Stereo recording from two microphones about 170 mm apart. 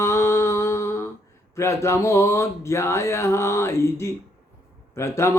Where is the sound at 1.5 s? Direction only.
15° left (ahead or behind).